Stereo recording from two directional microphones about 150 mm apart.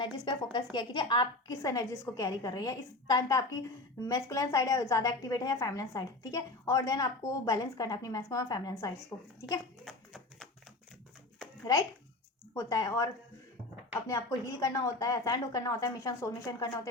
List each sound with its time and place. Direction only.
0.5 s a woman's voice: 30° left (ahead or behind)
9.8 s a sound: centre (ahead or behind)
11.6 s a woman's voice: 25° left (ahead or behind)
14.1 s a woman's voice: 20° left (ahead or behind)